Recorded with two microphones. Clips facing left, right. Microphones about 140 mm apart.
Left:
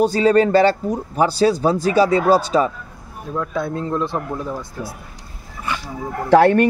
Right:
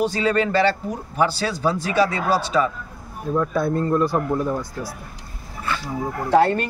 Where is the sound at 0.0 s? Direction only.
35° left (ahead or behind).